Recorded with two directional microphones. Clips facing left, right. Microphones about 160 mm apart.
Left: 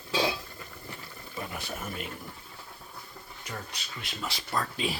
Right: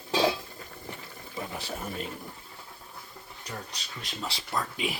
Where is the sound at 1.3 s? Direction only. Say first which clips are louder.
Right 1 dB; 20° right (ahead or behind).